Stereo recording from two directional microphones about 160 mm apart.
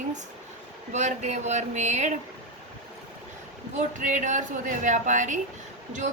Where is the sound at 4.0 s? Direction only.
50° right (ahead or behind).